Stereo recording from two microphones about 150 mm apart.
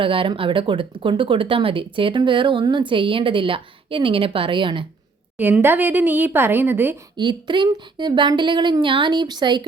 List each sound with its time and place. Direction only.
0.0 s speech: 35° right (ahead or behind)
5.4 s a woman's voice: 15° right (ahead or behind)
7.2 s speech: 30° right (ahead or behind)